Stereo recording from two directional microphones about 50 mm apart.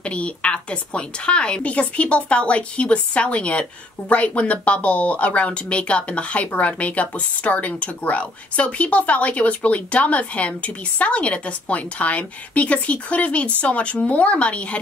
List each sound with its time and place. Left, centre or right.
0.0 s speech: left